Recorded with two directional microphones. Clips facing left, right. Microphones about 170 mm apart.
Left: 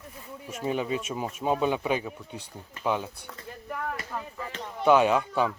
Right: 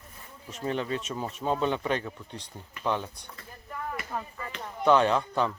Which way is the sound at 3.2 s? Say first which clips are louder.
Left 6 dB; 85° left.